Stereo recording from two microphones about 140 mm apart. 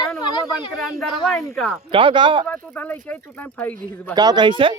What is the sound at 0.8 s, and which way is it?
Speech, centre (ahead or behind).